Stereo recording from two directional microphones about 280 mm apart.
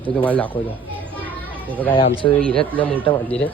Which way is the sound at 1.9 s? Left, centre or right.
Centre.